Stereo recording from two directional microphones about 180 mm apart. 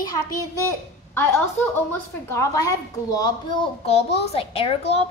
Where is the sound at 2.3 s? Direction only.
15° left (ahead or behind).